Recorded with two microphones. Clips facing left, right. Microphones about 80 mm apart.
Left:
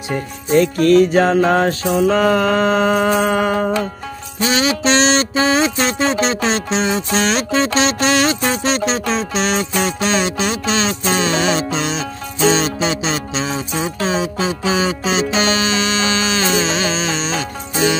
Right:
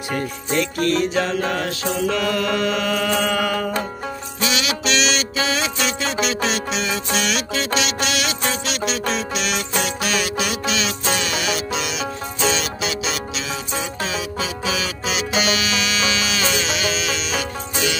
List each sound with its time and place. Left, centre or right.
0.7 s music: right
1.1 s mantra: left
4.4 s music: left